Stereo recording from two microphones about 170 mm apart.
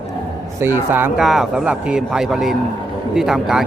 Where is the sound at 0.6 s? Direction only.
10° right (ahead or behind).